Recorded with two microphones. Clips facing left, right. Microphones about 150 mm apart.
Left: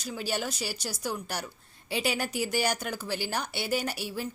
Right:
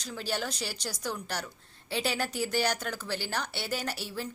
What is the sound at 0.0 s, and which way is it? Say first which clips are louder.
Speech: left 2 dB; 10° left (ahead or behind).